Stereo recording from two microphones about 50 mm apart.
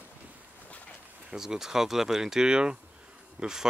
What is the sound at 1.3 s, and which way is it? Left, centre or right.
Speech, centre.